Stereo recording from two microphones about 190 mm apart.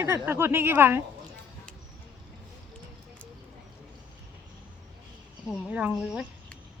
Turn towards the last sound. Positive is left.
turn(degrees=-5)  # may be behind; listen again after turning